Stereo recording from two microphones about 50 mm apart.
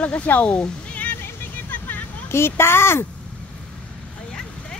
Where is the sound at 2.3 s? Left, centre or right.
Left.